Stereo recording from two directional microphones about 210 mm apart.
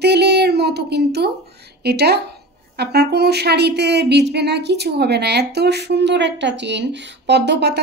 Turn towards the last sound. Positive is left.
turn(degrees=-55)  # may be behind; listen again after turning